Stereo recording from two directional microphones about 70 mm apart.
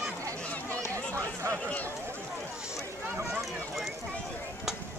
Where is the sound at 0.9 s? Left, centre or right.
Left.